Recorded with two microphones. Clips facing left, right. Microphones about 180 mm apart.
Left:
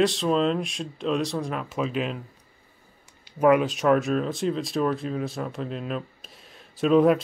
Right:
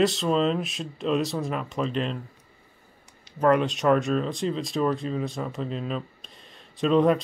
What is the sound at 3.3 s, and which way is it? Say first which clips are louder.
Speech: left 2 dB; 10° left (ahead or behind).